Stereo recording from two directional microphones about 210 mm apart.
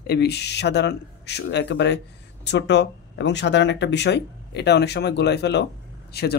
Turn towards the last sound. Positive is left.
turn(degrees=50)  # may be behind; listen again after turning